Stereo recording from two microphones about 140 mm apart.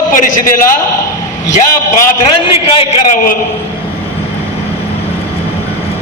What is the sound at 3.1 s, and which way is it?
Speech, 65° left (ahead or behind).